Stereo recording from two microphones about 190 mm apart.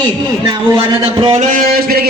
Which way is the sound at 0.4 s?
25° right (ahead or behind).